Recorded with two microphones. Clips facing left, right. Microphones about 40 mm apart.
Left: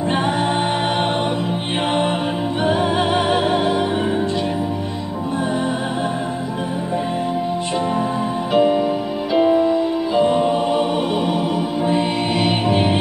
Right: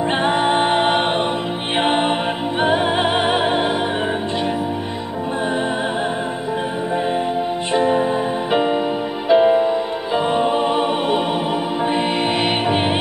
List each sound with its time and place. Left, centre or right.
0.1 s a capella: right
1.8 s music: right
7.7 s music: right